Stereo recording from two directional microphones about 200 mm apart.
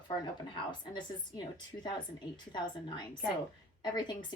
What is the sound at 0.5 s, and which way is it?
Speech, 20° left (ahead or behind).